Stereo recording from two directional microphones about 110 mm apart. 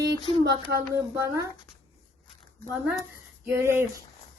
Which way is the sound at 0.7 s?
30° right (ahead or behind).